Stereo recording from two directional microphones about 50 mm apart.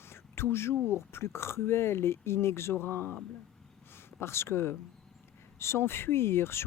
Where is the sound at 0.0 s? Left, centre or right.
Left.